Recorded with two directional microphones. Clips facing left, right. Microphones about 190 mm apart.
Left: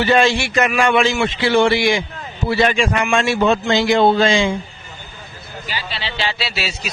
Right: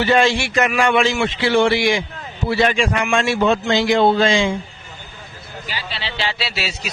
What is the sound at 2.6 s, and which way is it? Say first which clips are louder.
A man's voice: left 1 dB; 20° left (ahead or behind).